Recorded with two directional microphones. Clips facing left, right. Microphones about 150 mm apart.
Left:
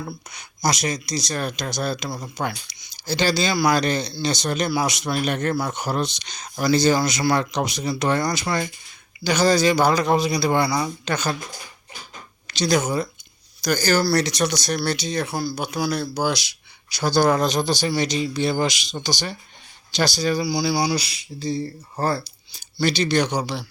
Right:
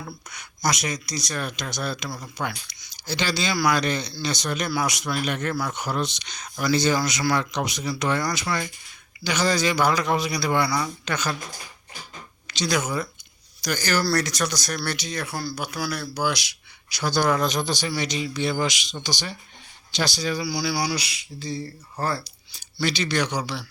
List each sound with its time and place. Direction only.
0.6 s speech: 35° left (ahead or behind)
2.0 s speech: 20° left (ahead or behind)
2.9 s speech: 35° left (ahead or behind)
12.5 s speech: 35° left (ahead or behind)
13.6 s speech: 40° left (ahead or behind)
14.0 s speech: 15° left (ahead or behind); by 20.4 s 40° left (ahead or behind)
20.4 s speech: 20° left (ahead or behind)
21.0 s speech: 35° left (ahead or behind)